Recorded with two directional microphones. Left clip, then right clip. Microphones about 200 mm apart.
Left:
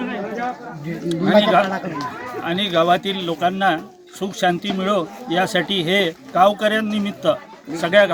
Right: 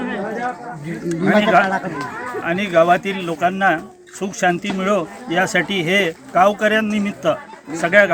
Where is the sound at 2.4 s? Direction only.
5° left (ahead or behind).